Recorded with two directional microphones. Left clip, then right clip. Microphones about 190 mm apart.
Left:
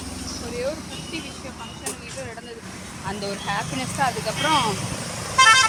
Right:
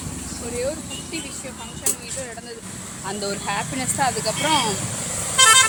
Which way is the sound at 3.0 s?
15° right (ahead or behind).